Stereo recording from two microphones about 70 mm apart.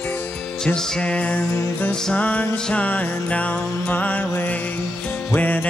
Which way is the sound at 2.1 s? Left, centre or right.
Left.